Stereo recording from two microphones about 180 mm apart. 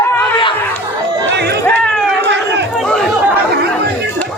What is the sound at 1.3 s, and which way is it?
Run, 65° right (ahead or behind).